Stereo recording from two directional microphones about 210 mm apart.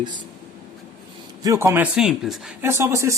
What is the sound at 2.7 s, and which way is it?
Speech, 15° right (ahead or behind).